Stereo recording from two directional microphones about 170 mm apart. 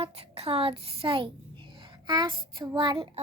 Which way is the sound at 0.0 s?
35° right (ahead or behind).